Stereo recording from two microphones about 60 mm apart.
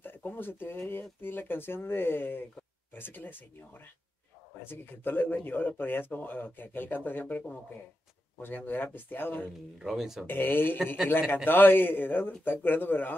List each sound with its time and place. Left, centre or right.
0.0 s speech: left
9.8 s speech: centre
10.2 s speech: left